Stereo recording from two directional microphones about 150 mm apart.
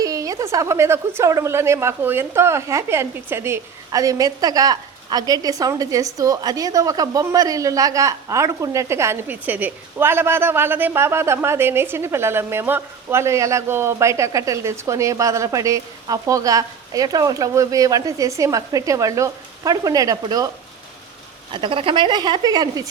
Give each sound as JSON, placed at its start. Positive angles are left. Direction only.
{"t": 0.0, "sound": "a woman's voice", "side_deg": -25}
{"t": 21.5, "sound": "a woman's voice", "side_deg": -35}